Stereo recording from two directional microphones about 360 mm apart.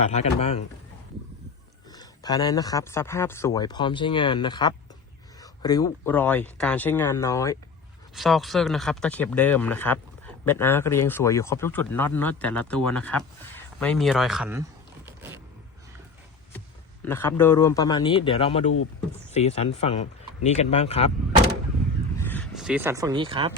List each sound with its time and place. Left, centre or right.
0.1 s speech: centre
1.9 s speech: centre
17.0 s speech: centre
22.2 s speech: centre